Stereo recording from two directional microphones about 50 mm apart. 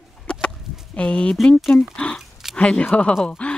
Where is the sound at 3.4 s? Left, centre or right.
Left.